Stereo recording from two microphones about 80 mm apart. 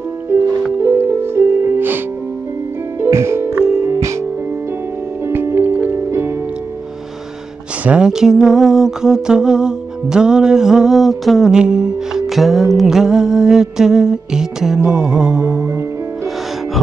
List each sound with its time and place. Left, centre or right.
0.7 s music: right
3.0 s music: right
5.3 s music: right
7.8 s music: centre